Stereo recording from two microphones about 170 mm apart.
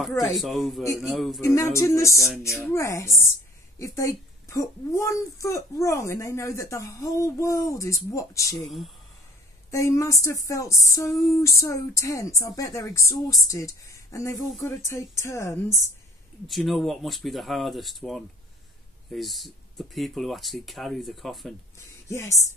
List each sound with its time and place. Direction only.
0.2 s speech: centre (ahead or behind)
1.4 s a child's voice: 15° left (ahead or behind)
8.6 s speech: centre (ahead or behind)
9.7 s a child's voice: 20° left (ahead or behind)
16.4 s speech: centre (ahead or behind)
21.7 s speech: 15° left (ahead or behind)